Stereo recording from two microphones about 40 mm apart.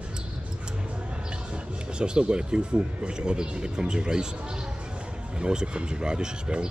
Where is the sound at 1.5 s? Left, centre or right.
Right.